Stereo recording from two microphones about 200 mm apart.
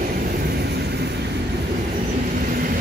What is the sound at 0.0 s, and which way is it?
Vehicle, 50° right (ahead or behind).